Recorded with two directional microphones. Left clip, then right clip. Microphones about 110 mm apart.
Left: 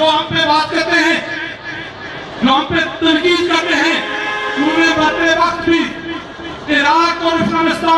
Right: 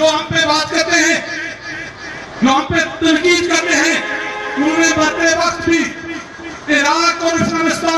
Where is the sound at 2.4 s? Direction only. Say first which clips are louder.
Even; 55° right (ahead or behind).